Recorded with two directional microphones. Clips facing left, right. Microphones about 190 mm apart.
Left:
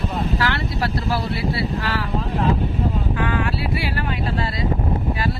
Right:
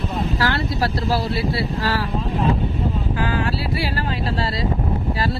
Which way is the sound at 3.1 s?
35° right (ahead or behind).